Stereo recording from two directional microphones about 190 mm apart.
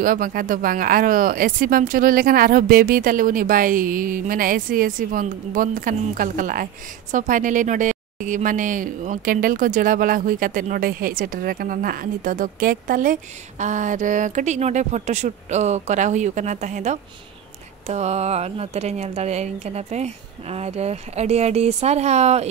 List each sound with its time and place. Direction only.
0.0 s speech: 50° right (ahead or behind)